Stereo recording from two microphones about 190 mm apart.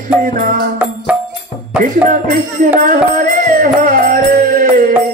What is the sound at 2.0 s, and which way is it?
Music, 45° right (ahead or behind).